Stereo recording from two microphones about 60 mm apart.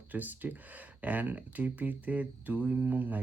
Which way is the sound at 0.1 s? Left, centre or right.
Right.